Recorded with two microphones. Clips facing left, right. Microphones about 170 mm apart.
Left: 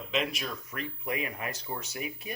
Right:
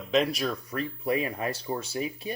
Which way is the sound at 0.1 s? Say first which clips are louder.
Right 7 dB; 35° right (ahead or behind).